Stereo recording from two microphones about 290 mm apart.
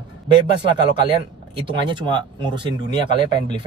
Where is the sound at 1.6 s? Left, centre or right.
Centre.